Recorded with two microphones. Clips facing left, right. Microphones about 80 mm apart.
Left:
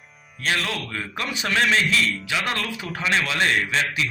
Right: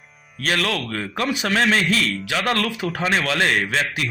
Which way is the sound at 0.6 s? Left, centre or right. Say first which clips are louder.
Right 5 dB; right.